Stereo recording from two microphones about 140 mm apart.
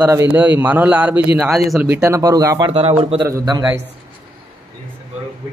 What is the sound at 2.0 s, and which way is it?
Speech, 25° right (ahead or behind).